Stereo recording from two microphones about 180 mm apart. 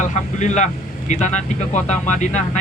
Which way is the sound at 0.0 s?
40° left (ahead or behind).